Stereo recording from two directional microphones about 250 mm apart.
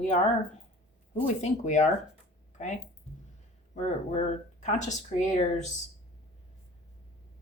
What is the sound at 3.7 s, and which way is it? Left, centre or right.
Speech, left.